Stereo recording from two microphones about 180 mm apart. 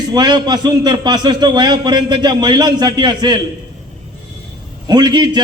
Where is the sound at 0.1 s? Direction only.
25° right (ahead or behind).